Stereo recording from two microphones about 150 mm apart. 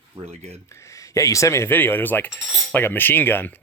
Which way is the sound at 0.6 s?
20° left (ahead or behind).